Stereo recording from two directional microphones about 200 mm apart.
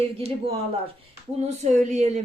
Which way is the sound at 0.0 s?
30° right (ahead or behind).